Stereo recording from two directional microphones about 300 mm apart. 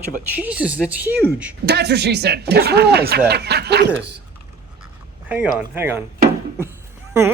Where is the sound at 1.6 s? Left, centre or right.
Right.